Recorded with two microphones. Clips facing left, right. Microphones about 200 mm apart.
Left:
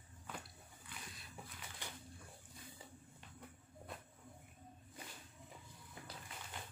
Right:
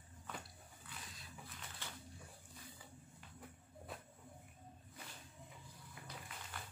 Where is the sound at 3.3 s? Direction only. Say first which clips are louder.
Right 1 dB; centre (ahead or behind).